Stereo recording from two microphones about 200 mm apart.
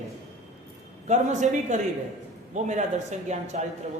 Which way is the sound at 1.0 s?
35° right (ahead or behind).